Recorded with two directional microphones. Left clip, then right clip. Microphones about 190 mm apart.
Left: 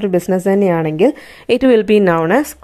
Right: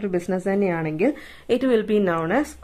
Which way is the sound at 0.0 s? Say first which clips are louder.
Left 9 dB; 40° left (ahead or behind).